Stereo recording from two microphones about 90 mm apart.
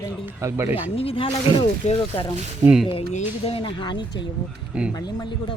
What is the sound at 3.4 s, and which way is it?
Speech, 80° left.